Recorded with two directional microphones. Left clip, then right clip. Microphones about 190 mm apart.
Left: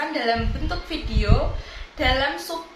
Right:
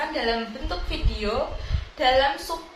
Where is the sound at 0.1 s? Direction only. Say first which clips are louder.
Left 2 dB; 15° left (ahead or behind).